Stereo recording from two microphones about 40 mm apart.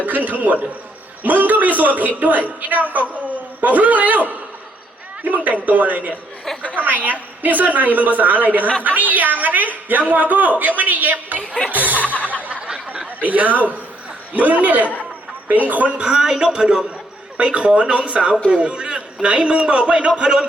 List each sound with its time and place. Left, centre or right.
0.0 s a woman's voice: right
11.9 s music: left
13.2 s a woman's voice: right
16.0 s a man's voice: centre
17.3 s a man's voice: right